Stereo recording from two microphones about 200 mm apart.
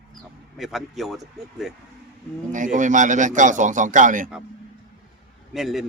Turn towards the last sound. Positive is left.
turn(degrees=0)  # may be behind; listen again after turning